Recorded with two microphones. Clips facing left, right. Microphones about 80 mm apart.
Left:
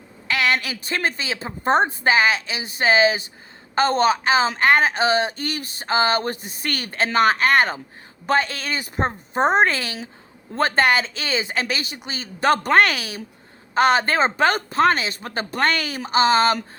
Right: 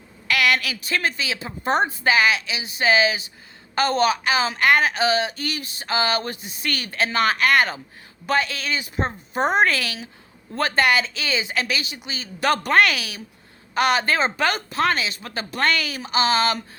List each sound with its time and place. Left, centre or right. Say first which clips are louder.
0.3 s a woman's voice: even; left